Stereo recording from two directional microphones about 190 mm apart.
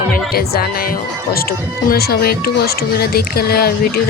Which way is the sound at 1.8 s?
55° left (ahead or behind).